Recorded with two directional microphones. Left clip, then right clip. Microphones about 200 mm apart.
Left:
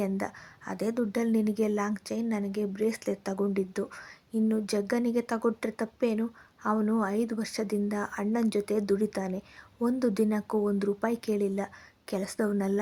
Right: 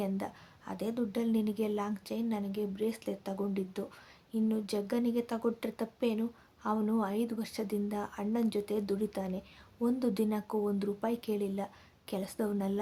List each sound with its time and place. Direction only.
0.0 s speech: 20° left (ahead or behind)